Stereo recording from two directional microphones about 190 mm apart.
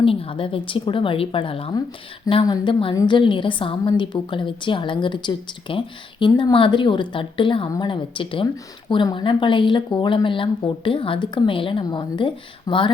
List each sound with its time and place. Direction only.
0.0 s a woman's voice: 30° left (ahead or behind)